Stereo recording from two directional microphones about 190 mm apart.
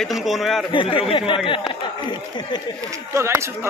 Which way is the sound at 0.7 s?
25° left (ahead or behind).